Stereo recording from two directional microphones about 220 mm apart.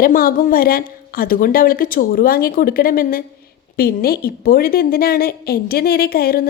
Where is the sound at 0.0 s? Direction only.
40° left (ahead or behind).